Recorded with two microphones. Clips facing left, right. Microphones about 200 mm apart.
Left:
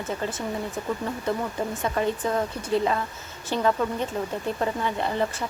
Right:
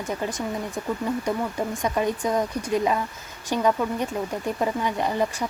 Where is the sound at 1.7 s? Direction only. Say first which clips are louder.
Right 1 dB; 15° right (ahead or behind).